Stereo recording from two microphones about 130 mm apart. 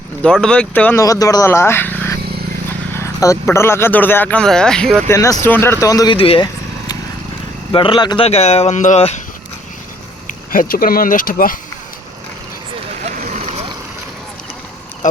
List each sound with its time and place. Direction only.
0.2 s speech: 5° left (ahead or behind)
0.9 s speech: 25° left (ahead or behind); by 5.0 s 5° left (ahead or behind)
5.0 s speech: 25° left (ahead or behind)
6.1 s speech: 45° left (ahead or behind)
7.7 s speech: 40° left (ahead or behind)
8.3 s speech: 55° left (ahead or behind)
10.2 s speech: 90° left
13.0 s vehicle: 80° right